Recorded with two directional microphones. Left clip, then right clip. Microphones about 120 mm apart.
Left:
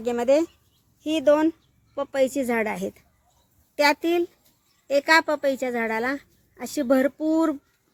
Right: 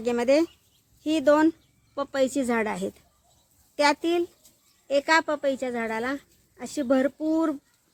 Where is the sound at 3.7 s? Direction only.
15° left (ahead or behind); by 7.6 s 30° left (ahead or behind).